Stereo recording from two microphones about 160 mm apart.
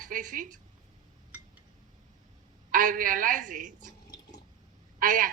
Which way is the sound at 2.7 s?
60° right (ahead or behind).